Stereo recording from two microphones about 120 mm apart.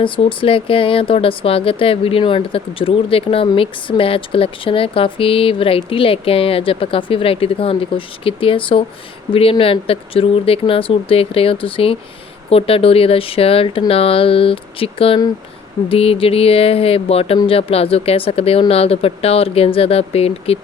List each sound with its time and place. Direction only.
0.0 s speech: 45° left (ahead or behind)